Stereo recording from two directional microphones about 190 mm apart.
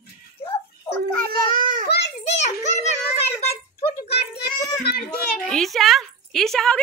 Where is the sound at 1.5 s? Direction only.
45° right (ahead or behind).